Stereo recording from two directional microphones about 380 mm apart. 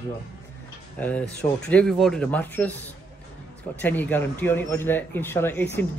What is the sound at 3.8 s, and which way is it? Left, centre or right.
Speech, centre.